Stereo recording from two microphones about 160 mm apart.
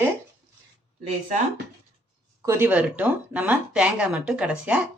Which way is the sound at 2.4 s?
15° right (ahead or behind).